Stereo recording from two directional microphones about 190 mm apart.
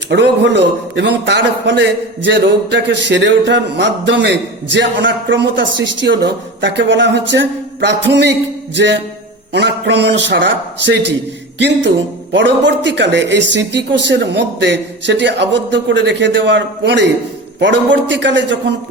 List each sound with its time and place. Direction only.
0.1 s a man's voice: 65° right (ahead or behind)